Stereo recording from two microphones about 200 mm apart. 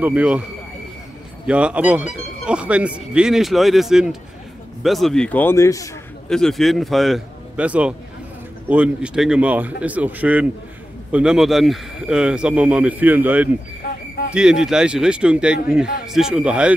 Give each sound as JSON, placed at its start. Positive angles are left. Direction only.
{"t": 0.0, "sound": "speech", "side_deg": -5}
{"t": 1.5, "sound": "speech", "side_deg": -5}
{"t": 6.2, "sound": "a man's voice", "side_deg": 5}
{"t": 13.8, "sound": "a sound", "side_deg": 50}
{"t": 14.3, "sound": "speech", "side_deg": -5}